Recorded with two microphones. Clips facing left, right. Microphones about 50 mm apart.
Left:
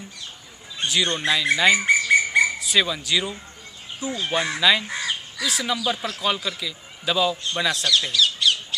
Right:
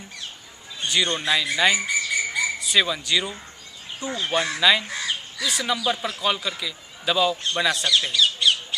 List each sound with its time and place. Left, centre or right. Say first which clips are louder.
0.8 s a man's voice: left 1 dB; centre
1.9 s a sound: left 7 dB; left
2.6 s a man's voice: even; centre